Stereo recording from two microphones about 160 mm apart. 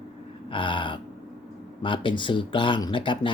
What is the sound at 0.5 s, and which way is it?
Speech, 30° left (ahead or behind).